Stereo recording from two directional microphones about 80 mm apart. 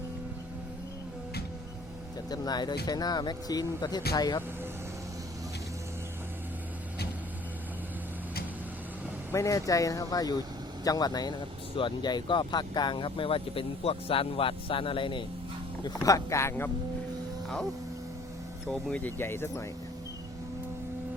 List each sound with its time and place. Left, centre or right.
2.3 s speech: left
9.3 s speech: left
11.8 s speech: left
15.8 s speech: left
18.7 s speech: centre
19.0 s speech: left